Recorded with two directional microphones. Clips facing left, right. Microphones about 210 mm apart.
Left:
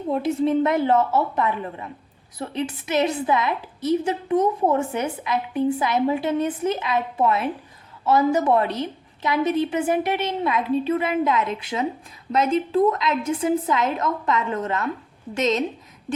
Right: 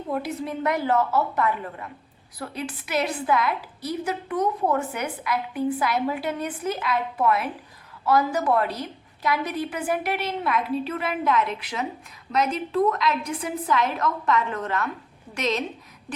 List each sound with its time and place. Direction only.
0.1 s a woman's voice: 25° left (ahead or behind)